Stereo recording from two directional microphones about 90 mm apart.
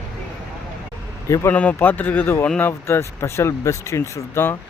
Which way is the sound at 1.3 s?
30° left (ahead or behind).